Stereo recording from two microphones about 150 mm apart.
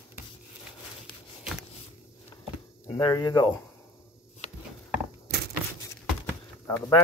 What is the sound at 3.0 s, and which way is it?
Speech, 25° left (ahead or behind).